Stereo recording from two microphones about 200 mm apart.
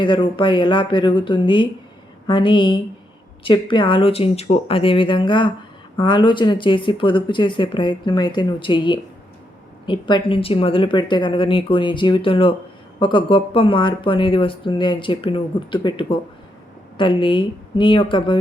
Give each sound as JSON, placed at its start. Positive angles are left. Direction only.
{"t": 0.0, "sound": "speech", "side_deg": 25}